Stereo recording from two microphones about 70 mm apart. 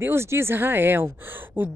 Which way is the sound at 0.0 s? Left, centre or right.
Right.